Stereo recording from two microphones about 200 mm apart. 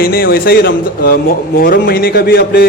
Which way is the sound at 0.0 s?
50° left (ahead or behind).